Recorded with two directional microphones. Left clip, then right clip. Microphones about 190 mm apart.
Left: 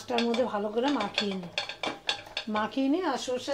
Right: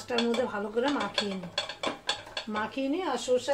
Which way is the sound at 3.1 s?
15° left (ahead or behind).